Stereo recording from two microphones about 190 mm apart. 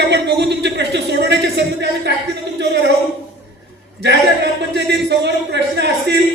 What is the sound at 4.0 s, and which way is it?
Speech, 65° right (ahead or behind).